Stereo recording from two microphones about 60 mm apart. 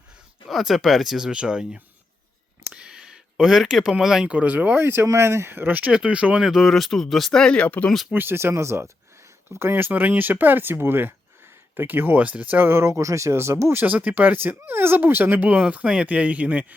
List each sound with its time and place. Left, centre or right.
0.4 s speech: centre
2.7 s a sound: centre
3.9 s speech: centre
4.3 s speech: right
4.8 s speech: right
5.9 s speech: centre
6.4 s speech: centre
7.4 s speech: centre
8.1 s speech: right
12.8 s speech: right
13.8 s speech: right
15.6 s speech: centre